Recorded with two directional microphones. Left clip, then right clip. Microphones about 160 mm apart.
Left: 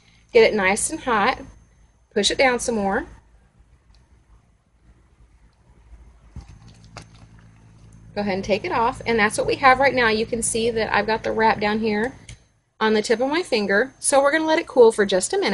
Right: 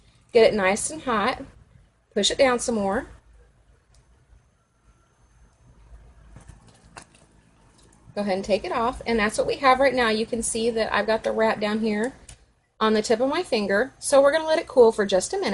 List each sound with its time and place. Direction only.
0.3 s a woman's voice: 55° left (ahead or behind)
8.1 s a woman's voice: 55° left (ahead or behind)